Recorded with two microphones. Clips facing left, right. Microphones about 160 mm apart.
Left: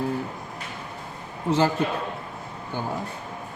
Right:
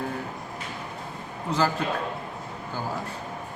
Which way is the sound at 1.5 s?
25° left (ahead or behind).